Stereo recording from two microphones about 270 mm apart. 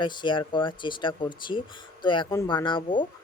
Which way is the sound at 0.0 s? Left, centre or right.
Centre.